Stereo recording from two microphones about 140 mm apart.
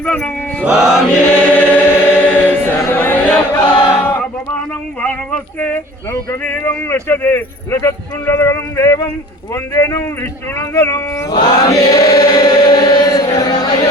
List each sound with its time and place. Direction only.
0.0 s chant: 10° left (ahead or behind)
0.6 s mantra: centre (ahead or behind)
1.5 s choir: 10° left (ahead or behind)
4.0 s a sound: 15° left (ahead or behind)
4.9 s speech: 10° left (ahead or behind); by 13.8 s 30° left (ahead or behind)